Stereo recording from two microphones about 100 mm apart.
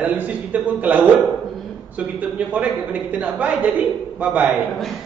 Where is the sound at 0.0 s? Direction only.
15° right (ahead or behind).